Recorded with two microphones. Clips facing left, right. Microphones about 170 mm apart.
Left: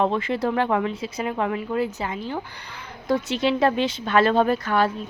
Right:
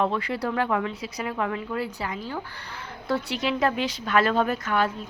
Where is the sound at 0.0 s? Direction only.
25° left (ahead or behind).